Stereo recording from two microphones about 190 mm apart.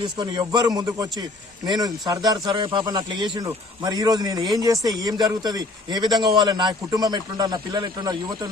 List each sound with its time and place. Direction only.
0.0 s a man's voice: 25° right (ahead or behind)